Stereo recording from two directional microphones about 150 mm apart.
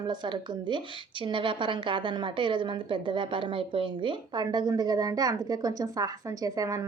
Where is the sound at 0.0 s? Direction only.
30° right (ahead or behind).